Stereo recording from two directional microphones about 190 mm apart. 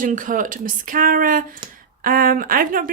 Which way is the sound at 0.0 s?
45° right (ahead or behind).